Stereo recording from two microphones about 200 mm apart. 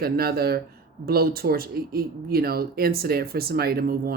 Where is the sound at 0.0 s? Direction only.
50° right (ahead or behind).